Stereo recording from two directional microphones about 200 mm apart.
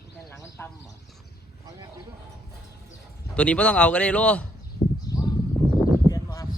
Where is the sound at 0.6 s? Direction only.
10° left (ahead or behind).